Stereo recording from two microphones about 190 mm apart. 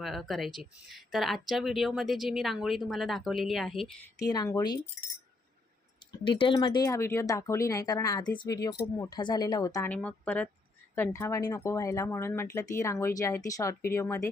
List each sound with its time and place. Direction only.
0.0 s speech: centre (ahead or behind)
4.2 s speech: 20° left (ahead or behind)
6.1 s speech: 25° left (ahead or behind)